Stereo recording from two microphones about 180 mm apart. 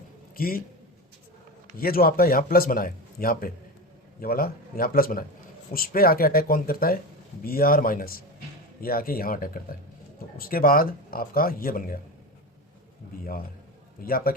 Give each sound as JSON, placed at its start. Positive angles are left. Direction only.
{"t": 0.3, "sound": "a man's voice", "side_deg": 55}
{"t": 1.8, "sound": "a man's voice", "side_deg": 55}
{"t": 13.1, "sound": "a man's voice", "side_deg": 55}